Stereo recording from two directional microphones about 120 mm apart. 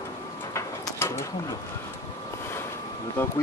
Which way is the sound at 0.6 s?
25° left (ahead or behind).